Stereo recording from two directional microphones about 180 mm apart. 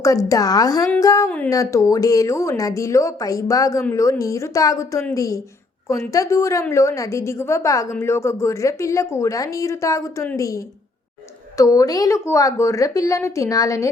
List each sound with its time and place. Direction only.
0.0 s a woman's voice: 20° left (ahead or behind)